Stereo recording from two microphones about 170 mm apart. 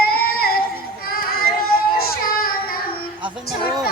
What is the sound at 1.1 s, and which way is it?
Child singing, 60° left (ahead or behind).